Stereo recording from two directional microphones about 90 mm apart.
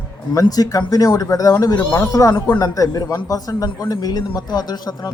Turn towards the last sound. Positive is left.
turn(degrees=50)  # may be behind; listen again after turning